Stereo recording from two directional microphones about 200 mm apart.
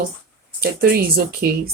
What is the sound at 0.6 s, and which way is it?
Speech, 50° right (ahead or behind).